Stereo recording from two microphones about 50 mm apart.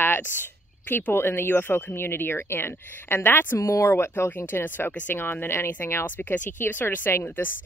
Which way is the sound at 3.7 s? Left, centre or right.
Left.